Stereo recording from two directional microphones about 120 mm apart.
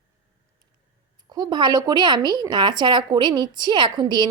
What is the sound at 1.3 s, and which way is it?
A woman's voice, 35° right (ahead or behind).